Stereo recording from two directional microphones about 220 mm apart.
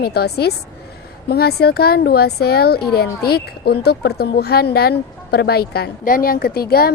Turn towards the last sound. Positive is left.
turn(degrees=45)  # may be behind; listen again after turning